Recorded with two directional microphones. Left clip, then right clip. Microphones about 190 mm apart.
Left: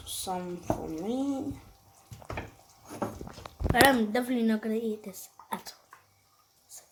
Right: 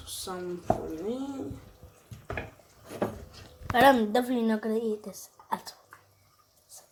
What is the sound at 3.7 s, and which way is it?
Speech, centre (ahead or behind).